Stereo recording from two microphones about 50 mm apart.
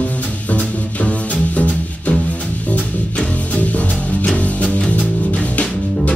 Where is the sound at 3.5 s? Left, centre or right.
Left.